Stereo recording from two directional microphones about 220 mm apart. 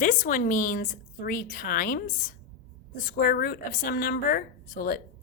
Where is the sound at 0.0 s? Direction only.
35° left (ahead or behind).